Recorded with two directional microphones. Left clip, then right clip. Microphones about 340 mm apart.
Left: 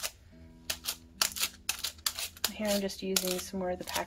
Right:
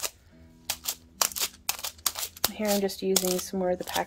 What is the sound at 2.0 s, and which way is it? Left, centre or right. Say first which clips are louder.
Speech: right 5 dB; centre.